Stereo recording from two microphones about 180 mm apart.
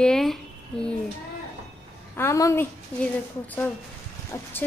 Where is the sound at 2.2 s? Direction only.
15° left (ahead or behind).